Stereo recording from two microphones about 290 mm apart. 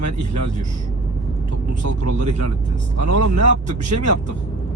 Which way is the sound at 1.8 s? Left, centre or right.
Right.